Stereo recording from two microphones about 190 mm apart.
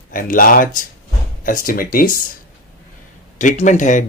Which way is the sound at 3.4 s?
40° left (ahead or behind).